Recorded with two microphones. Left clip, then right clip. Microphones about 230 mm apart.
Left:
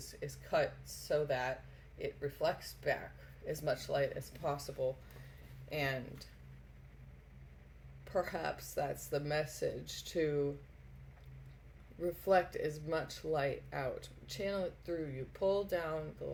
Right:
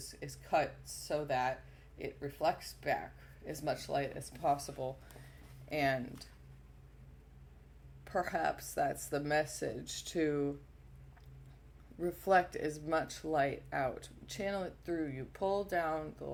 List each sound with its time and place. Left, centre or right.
0.0 s speech: right
8.0 s speech: right
11.9 s speech: right